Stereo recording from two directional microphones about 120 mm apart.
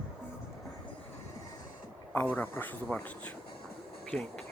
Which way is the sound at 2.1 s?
15° left (ahead or behind).